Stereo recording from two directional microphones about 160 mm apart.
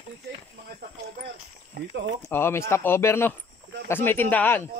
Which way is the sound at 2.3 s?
15° left (ahead or behind).